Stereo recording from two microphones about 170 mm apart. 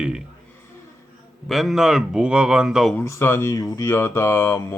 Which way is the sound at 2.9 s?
15° left (ahead or behind).